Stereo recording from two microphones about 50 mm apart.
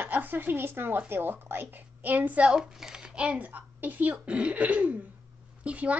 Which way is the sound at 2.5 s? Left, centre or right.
Centre.